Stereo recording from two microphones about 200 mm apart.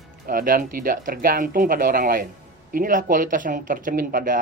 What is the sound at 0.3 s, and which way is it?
Speech, 45° right (ahead or behind).